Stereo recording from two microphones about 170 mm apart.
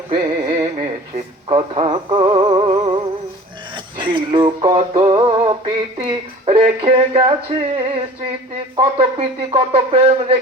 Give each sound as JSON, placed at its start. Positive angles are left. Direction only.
{"t": 0.1, "sound": "music", "side_deg": -30}
{"t": 1.5, "sound": "synthetic singing", "side_deg": -35}